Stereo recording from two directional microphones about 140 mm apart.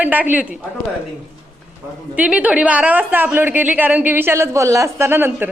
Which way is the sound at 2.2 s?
10° right (ahead or behind).